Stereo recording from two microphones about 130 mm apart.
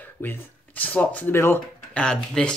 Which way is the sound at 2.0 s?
5° left (ahead or behind).